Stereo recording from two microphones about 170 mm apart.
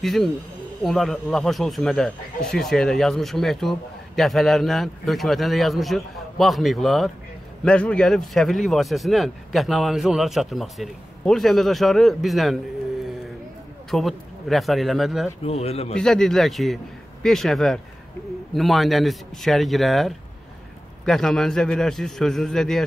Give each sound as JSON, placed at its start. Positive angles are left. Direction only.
{"t": 0.0, "sound": "speech", "side_deg": 0}
{"t": 13.8, "sound": "speech", "side_deg": 0}
{"t": 15.4, "sound": "speech", "side_deg": 35}
{"t": 16.0, "sound": "speech", "side_deg": 5}